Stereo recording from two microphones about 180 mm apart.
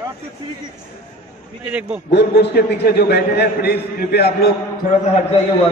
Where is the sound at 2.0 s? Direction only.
70° left (ahead or behind).